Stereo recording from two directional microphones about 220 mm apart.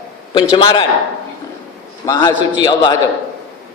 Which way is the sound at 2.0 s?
15° left (ahead or behind).